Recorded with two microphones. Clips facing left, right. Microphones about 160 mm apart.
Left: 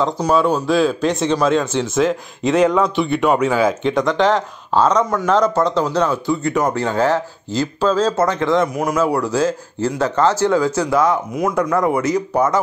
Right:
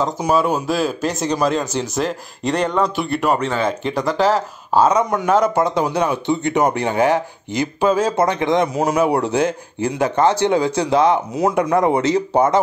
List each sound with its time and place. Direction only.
0.0 s a man's voice: 5° right (ahead or behind); by 12.5 s 30° right (ahead or behind)